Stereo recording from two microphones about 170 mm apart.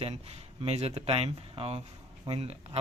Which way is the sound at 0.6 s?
35° right (ahead or behind).